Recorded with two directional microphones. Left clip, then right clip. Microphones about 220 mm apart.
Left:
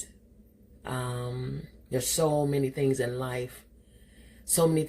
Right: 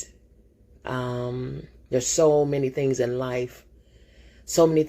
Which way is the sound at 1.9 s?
35° right (ahead or behind).